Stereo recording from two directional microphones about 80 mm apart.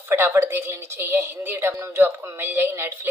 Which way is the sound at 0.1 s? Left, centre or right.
Right.